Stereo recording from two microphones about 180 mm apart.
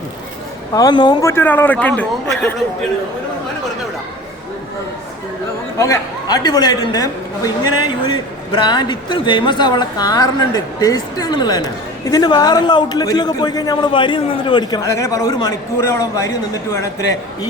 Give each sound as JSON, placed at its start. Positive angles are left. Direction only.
{"t": 0.7, "sound": "a man's voice", "side_deg": 20}
{"t": 5.8, "sound": "a man's voice", "side_deg": 20}